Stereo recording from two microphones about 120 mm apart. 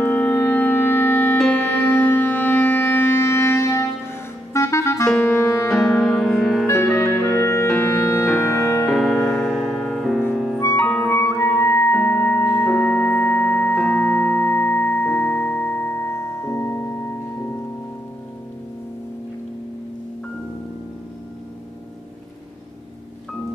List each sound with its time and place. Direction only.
0.0 s music: 15° left (ahead or behind)
5.9 s music: centre (ahead or behind)
7.0 s clarinet: 20° left (ahead or behind)
7.8 s music: 20° left (ahead or behind)
8.3 s music: 5° right (ahead or behind)
10.6 s music: 20° left (ahead or behind)